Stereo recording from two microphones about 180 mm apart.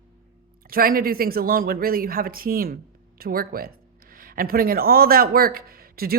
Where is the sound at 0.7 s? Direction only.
55° right (ahead or behind).